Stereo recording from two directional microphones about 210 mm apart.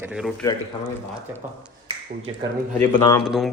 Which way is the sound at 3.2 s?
Centre (ahead or behind).